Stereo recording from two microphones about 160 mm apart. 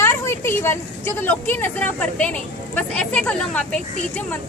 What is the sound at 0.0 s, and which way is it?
A woman's voice, 15° left (ahead or behind).